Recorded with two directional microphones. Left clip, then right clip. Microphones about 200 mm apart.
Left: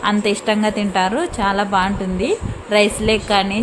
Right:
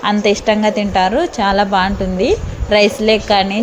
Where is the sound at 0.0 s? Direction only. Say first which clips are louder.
Right 4 dB; 10° right (ahead or behind).